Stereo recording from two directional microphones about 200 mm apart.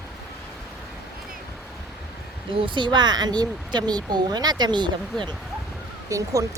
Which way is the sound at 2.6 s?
25° right (ahead or behind).